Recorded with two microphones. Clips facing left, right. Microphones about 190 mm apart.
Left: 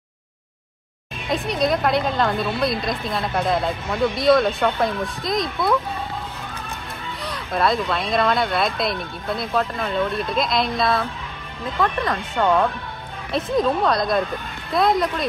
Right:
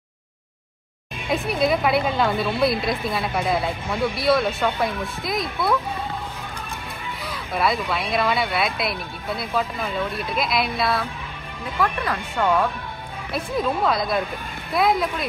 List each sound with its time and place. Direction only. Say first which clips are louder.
1.3 s a woman's voice: even; 5° right (ahead or behind)
7.2 s a sound: left 2 dB; centre (ahead or behind)
7.9 s a woman's voice: left 2 dB; centre (ahead or behind)
11.8 s speech: left 2 dB; 15° left (ahead or behind)
13.6 s a woman's voice: left 2 dB; 5° right (ahead or behind)